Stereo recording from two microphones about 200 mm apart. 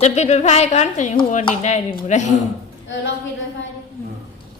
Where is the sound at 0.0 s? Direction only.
35° left (ahead or behind).